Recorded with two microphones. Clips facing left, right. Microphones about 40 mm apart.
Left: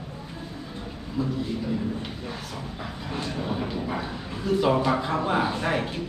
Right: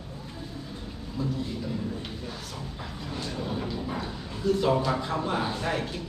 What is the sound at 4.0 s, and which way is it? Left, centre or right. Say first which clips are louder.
A man's voice: even; centre.